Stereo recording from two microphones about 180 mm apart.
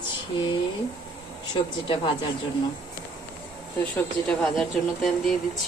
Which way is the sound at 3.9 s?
5° left (ahead or behind).